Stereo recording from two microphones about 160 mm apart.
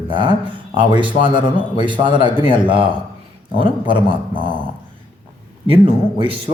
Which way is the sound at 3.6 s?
30° right (ahead or behind).